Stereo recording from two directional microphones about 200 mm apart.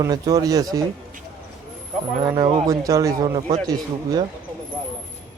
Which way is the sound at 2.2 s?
20° right (ahead or behind).